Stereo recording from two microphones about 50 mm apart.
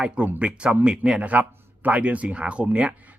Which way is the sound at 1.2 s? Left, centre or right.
Right.